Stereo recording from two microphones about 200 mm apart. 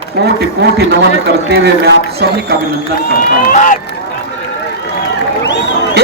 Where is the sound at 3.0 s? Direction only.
45° left (ahead or behind).